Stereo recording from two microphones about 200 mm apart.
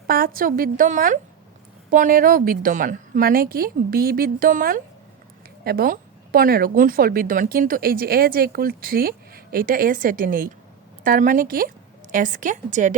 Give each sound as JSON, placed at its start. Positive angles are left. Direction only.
{"t": 0.1, "sound": "a woman's voice", "side_deg": -45}